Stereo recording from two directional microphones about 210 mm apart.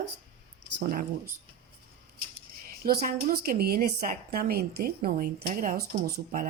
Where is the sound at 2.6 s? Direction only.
45° right (ahead or behind).